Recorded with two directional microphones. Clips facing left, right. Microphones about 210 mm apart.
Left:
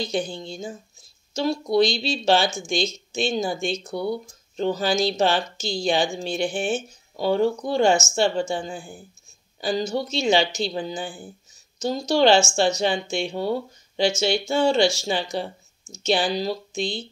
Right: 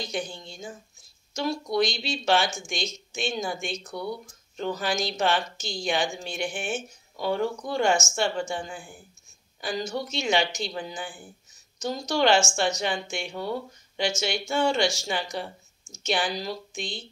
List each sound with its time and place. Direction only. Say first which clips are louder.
0.0 s speech: left 6 dB; 30° left (ahead or behind)